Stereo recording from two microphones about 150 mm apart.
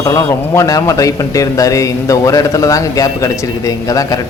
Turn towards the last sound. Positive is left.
turn(degrees=25)  # may be behind; listen again after turning